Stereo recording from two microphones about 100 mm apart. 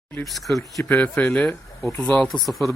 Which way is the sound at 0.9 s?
15° left (ahead or behind).